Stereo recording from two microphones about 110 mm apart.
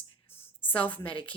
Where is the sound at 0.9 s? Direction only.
50° left (ahead or behind).